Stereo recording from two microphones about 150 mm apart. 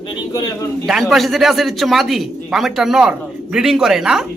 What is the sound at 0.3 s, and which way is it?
Speech, 25° left (ahead or behind).